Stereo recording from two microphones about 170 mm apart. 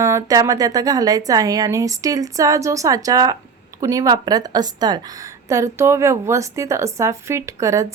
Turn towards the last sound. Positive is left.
turn(degrees=-20)  # may be behind; listen again after turning